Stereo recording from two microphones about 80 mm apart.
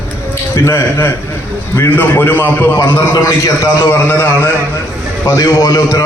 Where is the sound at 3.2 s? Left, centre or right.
Left.